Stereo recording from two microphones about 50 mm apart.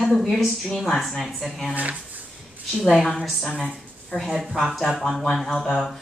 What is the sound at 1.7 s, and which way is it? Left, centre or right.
Speech, right.